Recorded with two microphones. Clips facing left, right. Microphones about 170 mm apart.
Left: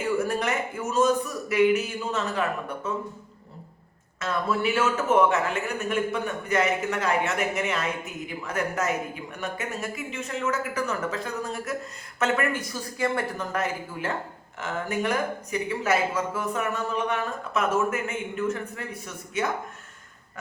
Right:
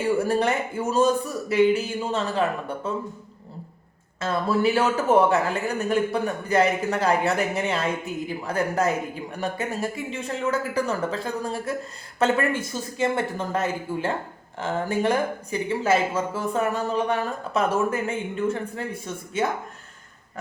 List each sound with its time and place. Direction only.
0.0 s speech: 30° right (ahead or behind)
4.2 s a man's voice: 35° right (ahead or behind)